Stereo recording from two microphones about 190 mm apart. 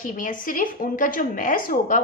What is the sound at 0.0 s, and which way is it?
Speech, 45° left (ahead or behind).